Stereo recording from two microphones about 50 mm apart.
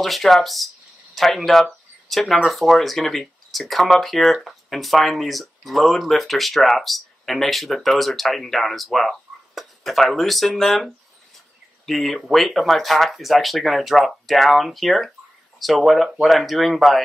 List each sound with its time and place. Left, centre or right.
0.0 s speech: centre